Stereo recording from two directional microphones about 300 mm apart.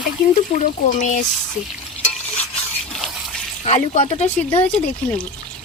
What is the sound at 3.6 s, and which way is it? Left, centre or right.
Speech, left.